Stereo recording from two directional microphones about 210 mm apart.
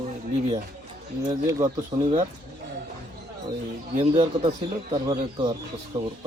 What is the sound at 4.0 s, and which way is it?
Speech, 30° right (ahead or behind).